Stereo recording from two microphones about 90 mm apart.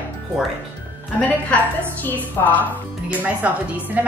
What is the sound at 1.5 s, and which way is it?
A woman's voice, 15° left (ahead or behind).